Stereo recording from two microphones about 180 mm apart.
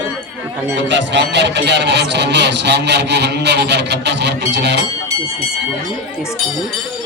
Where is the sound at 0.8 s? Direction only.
80° right.